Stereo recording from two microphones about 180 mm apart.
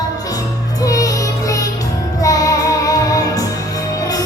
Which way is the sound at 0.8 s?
20° left (ahead or behind).